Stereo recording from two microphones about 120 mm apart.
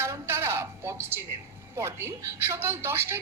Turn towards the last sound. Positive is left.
turn(degrees=-20)  # may be behind; listen again after turning